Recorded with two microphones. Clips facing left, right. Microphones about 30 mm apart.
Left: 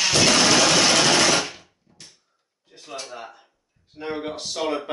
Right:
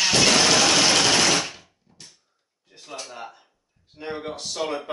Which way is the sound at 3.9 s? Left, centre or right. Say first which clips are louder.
Left 2 dB; centre.